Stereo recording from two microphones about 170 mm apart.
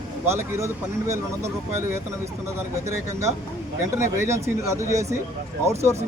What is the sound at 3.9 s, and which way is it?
Speech, 15° right (ahead or behind).